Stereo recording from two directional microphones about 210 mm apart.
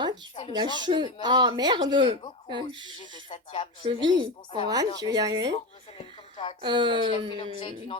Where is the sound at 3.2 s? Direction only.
25° left (ahead or behind).